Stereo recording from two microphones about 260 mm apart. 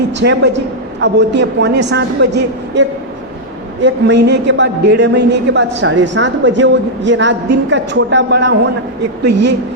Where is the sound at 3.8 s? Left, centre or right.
Right.